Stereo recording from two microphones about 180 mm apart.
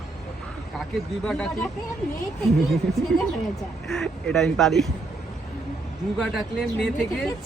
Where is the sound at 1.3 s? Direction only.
5° left (ahead or behind).